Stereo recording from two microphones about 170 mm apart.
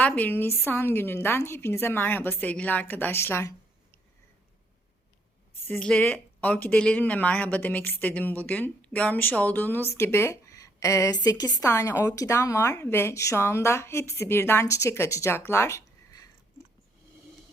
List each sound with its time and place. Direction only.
0.0 s speech: 10° left (ahead or behind)
5.6 s speech: 10° left (ahead or behind)